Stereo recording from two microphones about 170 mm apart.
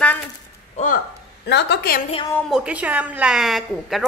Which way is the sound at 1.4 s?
85° left.